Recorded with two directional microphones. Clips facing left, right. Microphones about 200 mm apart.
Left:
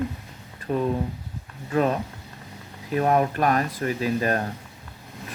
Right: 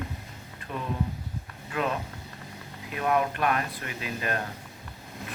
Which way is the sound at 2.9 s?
40° left (ahead or behind).